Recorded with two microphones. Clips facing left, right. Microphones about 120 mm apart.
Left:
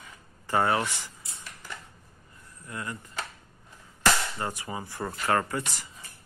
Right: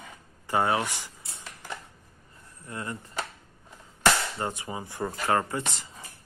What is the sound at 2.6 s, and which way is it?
Speech, 30° right (ahead or behind).